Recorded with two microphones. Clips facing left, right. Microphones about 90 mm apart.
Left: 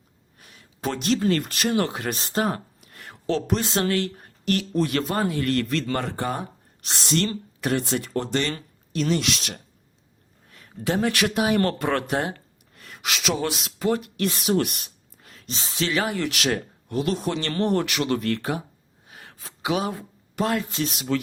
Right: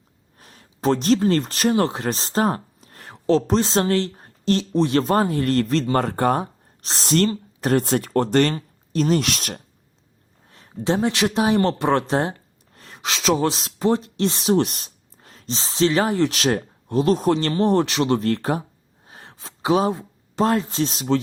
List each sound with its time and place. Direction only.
0.3 s speech: 40° right (ahead or behind)
5.9 s speech: 45° right (ahead or behind)
10.5 s speech: 30° right (ahead or behind)
19.0 s a sound: 30° right (ahead or behind)
20.4 s speech: 35° right (ahead or behind)